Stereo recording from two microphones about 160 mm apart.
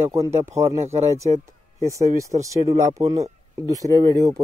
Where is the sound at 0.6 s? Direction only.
40° right (ahead or behind).